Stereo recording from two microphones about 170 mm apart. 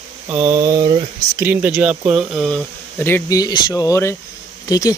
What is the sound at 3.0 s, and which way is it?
Speech, 15° left (ahead or behind).